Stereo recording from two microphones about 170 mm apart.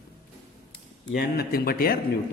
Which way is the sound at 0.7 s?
65° left (ahead or behind).